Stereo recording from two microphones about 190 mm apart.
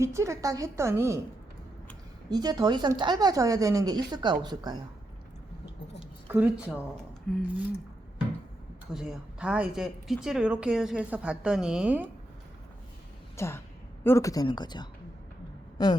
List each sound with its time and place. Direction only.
0.0 s a woman's voice: 15° right (ahead or behind)
2.3 s a woman's voice: 20° right (ahead or behind)
6.2 s speech: 10° right (ahead or behind)
7.3 s a woman's voice: 5° left (ahead or behind)
8.9 s a woman's voice: 5° right (ahead or behind)
13.3 s speech: 15° left (ahead or behind)